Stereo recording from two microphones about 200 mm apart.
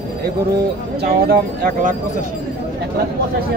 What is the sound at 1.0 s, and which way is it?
Speech, 50° right (ahead or behind).